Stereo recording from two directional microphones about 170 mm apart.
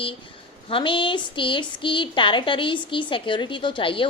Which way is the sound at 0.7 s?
30° left (ahead or behind).